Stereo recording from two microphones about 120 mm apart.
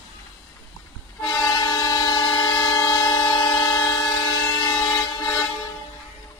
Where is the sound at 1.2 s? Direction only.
35° left (ahead or behind).